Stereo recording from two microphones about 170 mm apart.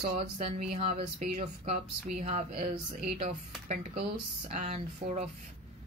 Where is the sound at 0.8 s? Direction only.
35° right (ahead or behind).